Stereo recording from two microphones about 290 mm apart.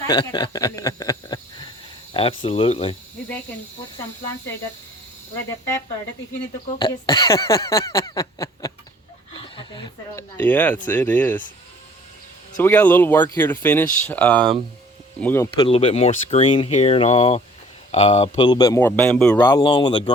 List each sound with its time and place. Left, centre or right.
0.0 s speech: centre
6.7 s speech: centre
9.3 s a sound: centre
10.8 s speech: centre
12.5 s speech: centre